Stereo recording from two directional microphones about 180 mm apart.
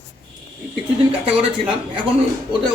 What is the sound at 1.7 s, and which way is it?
Speech, 30° right (ahead or behind).